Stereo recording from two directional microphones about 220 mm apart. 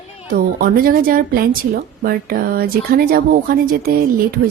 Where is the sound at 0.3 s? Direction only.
40° right (ahead or behind).